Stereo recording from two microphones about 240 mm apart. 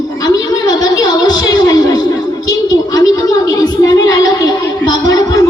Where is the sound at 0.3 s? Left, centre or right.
Centre.